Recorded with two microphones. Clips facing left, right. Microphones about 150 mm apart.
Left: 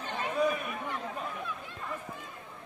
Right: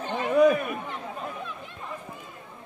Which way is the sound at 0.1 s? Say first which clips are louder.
Right 10 dB; 60° right (ahead or behind).